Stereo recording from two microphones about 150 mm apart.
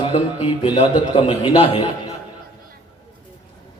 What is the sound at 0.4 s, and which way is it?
A man's voice, 35° left (ahead or behind).